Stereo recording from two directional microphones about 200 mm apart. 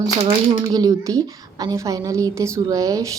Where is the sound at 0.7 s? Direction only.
15° right (ahead or behind).